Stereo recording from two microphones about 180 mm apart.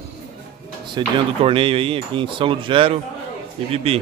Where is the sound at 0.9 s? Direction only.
30° right (ahead or behind).